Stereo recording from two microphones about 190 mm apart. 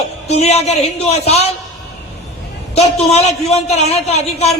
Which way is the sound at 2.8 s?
35° left (ahead or behind).